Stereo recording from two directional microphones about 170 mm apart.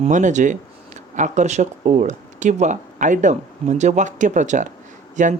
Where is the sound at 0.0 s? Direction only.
45° right (ahead or behind).